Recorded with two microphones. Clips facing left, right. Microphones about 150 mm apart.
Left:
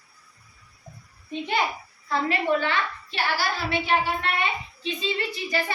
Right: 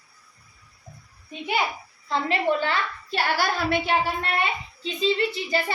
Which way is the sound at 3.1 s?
50° right (ahead or behind).